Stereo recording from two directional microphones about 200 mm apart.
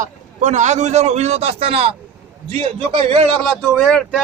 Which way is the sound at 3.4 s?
Centre (ahead or behind).